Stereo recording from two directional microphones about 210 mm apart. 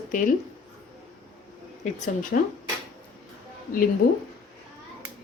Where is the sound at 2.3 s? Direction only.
45° left (ahead or behind).